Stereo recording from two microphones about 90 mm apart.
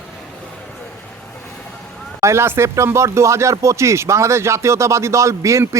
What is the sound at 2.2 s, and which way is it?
Speech, 30° right (ahead or behind).